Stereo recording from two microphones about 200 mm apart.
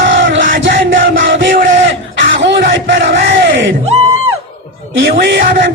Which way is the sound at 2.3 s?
60° right (ahead or behind).